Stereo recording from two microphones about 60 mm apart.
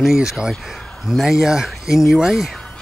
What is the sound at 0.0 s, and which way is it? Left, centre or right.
Speech, centre.